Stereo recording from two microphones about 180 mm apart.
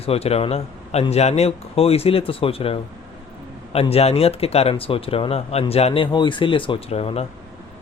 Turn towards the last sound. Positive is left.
turn(degrees=35)  # may be behind; listen again after turning